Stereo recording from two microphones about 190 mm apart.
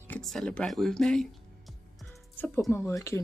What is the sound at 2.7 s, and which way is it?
Speech, 15° left (ahead or behind).